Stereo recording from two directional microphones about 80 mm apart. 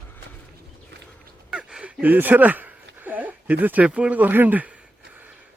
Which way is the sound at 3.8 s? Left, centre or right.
Centre.